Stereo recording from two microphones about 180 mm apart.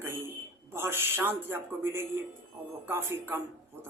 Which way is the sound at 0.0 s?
15° right (ahead or behind).